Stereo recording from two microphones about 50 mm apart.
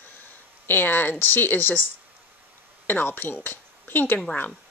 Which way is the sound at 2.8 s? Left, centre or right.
Left.